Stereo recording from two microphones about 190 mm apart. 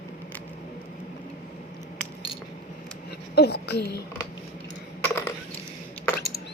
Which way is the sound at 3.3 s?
60° left (ahead or behind).